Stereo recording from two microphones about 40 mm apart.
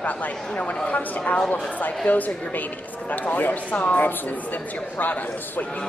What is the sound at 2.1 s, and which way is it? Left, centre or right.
Speech, left.